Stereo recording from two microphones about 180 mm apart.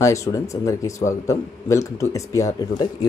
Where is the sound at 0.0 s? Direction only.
15° left (ahead or behind).